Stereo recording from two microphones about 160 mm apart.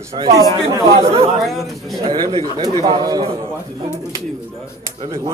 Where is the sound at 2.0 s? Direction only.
35° right (ahead or behind).